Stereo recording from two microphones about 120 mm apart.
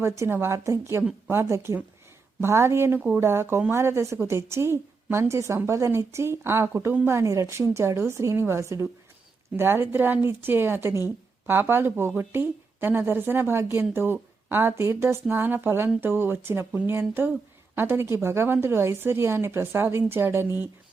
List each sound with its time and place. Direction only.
0.0 s speech: 20° right (ahead or behind)